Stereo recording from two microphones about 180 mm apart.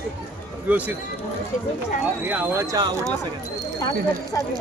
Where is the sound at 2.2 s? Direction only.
10° right (ahead or behind).